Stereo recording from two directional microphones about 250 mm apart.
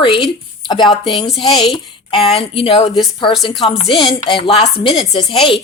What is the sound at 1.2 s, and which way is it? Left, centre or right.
Speech, left.